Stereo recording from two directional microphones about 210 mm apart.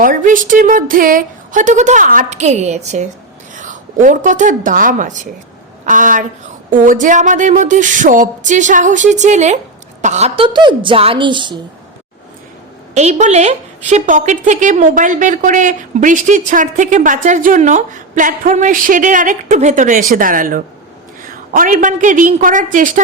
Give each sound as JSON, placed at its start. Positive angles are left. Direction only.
{"t": 0.0, "sound": "a woman's voice", "side_deg": -40}
{"t": 12.9, "sound": "a woman's voice", "side_deg": -30}